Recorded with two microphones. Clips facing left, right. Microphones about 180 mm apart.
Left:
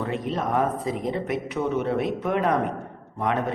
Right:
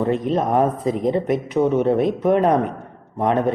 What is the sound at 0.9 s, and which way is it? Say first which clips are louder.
A man's voice: right 7 dB; 45° right (ahead or behind).